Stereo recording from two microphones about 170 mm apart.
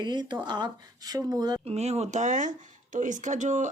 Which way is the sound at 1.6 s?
40° right (ahead or behind).